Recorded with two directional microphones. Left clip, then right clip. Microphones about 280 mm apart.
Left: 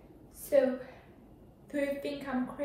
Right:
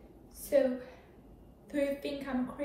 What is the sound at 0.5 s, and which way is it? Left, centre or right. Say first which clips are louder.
A woman's voice: left 1 dB; centre.